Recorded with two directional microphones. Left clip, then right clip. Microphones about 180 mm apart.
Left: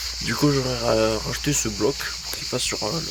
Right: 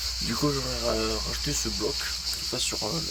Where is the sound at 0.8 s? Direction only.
30° left (ahead or behind).